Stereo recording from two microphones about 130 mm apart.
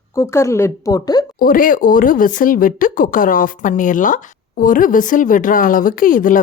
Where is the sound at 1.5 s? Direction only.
90° left.